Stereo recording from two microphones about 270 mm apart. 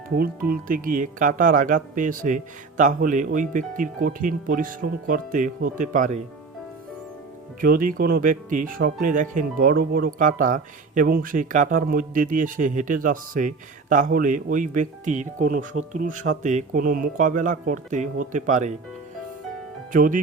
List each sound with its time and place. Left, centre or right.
0.2 s speech: right
7.6 s speech: right
19.9 s speech: right